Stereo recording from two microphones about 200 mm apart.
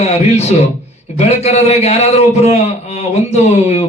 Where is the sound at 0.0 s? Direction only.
35° left (ahead or behind).